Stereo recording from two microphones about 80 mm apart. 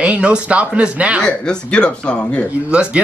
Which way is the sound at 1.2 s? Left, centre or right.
Centre.